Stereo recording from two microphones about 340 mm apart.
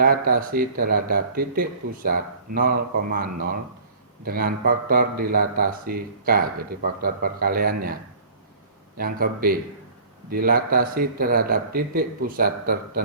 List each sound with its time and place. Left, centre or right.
0.0 s speech: right
9.0 s speech: right